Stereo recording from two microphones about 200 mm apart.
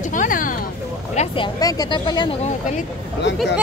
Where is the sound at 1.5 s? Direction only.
20° left (ahead or behind).